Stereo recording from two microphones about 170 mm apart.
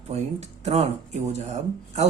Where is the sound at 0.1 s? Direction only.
40° right (ahead or behind).